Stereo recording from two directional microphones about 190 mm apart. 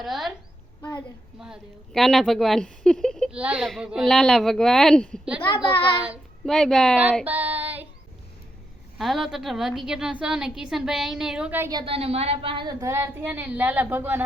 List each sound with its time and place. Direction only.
0.0 s a sound: centre (ahead or behind)
0.8 s child singing: 15° left (ahead or behind)
1.4 s a woman's voice: centre (ahead or behind)
6.4 s a woman's voice: centre (ahead or behind)
7.0 s child singing: 5° right (ahead or behind)
9.0 s a woman's voice: centre (ahead or behind)